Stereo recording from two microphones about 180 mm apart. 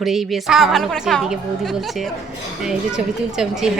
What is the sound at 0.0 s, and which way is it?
A woman's voice, centre (ahead or behind).